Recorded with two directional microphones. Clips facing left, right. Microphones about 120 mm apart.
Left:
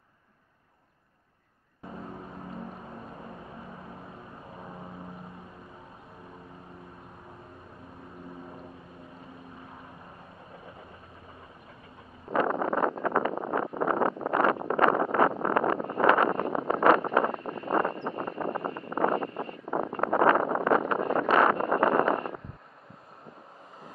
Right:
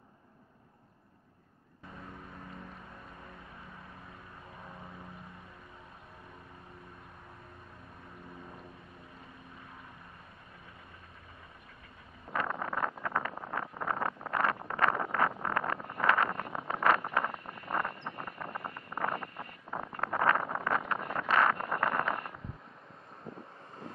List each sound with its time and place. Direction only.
12.3 s wind noise: 25° left (ahead or behind)
13.0 s vehicle: 25° left (ahead or behind)
13.3 s wind noise: 40° left (ahead or behind)
13.7 s vehicle: 25° left (ahead or behind)
14.7 s a sound: 25° left (ahead or behind)
15.4 s wind noise: 25° left (ahead or behind)
16.3 s a sound: 30° left (ahead or behind)
16.8 s vehicle: 25° left (ahead or behind)
20.0 s wind noise: 25° left (ahead or behind)